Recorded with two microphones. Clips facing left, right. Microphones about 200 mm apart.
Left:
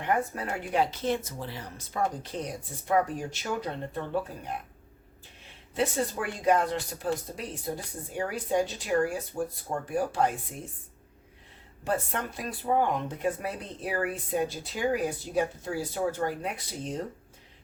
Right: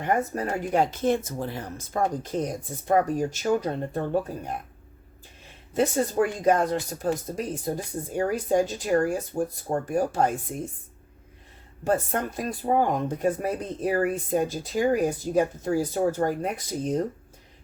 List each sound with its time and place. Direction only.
0.0 s speech: 45° right (ahead or behind)
5.7 s speech: 45° right (ahead or behind)
11.9 s speech: 45° right (ahead or behind)